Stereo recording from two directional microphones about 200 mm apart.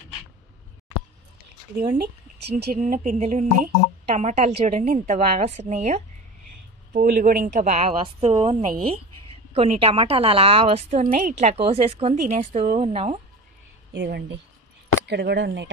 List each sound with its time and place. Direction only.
1.8 s a woman's voice: 50° right (ahead or behind); by 13.2 s 30° right (ahead or behind)
13.9 s speech: 60° right (ahead or behind)